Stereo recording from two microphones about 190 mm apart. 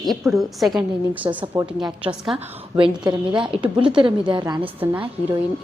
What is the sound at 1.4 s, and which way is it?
Speech, 25° right (ahead or behind).